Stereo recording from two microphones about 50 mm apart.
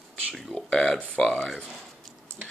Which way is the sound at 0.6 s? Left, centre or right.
Centre.